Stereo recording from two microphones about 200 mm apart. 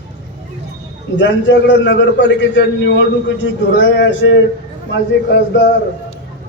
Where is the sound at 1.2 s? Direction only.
65° left (ahead or behind).